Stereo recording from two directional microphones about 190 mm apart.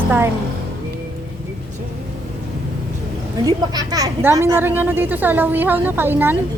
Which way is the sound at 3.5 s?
20° right (ahead or behind).